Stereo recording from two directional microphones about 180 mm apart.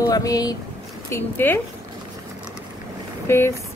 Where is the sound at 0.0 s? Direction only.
20° left (ahead or behind).